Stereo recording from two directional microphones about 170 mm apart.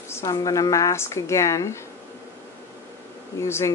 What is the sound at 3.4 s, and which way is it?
Speech, 15° left (ahead or behind).